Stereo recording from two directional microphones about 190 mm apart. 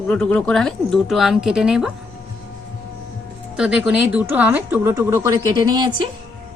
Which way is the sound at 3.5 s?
5° right (ahead or behind).